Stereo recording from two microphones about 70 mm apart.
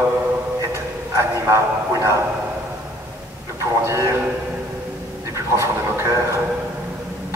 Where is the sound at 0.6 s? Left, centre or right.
Right.